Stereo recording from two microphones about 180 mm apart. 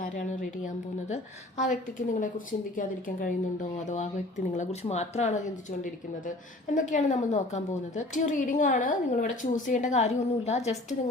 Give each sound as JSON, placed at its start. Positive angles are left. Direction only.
{"t": 0.0, "sound": "a woman's voice", "side_deg": 45}
{"t": 6.7, "sound": "a woman's voice", "side_deg": 45}